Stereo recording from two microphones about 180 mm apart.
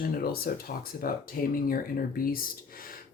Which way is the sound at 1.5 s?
55° left (ahead or behind).